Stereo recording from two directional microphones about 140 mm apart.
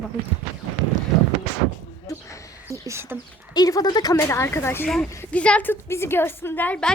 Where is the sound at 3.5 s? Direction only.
30° left (ahead or behind).